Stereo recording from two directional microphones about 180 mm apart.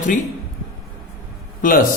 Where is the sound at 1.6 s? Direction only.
50° left (ahead or behind).